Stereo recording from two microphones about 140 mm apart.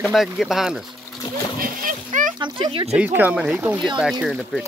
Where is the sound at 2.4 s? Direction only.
35° right (ahead or behind).